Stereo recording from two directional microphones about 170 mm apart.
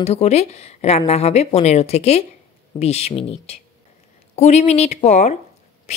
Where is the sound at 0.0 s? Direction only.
40° left (ahead or behind).